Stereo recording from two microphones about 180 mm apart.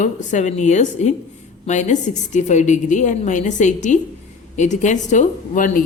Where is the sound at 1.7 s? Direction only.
40° left (ahead or behind).